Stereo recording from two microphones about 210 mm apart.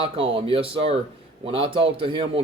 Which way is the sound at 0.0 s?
25° right (ahead or behind).